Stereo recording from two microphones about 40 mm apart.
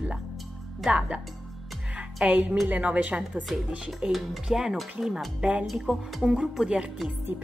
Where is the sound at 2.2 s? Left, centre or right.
Right.